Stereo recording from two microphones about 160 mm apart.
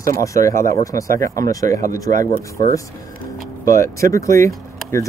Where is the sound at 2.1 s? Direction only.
60° right (ahead or behind).